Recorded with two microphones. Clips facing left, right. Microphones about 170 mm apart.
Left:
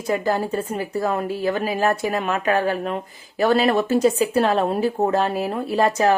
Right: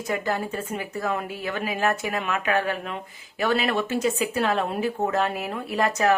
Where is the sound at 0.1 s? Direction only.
35° left (ahead or behind).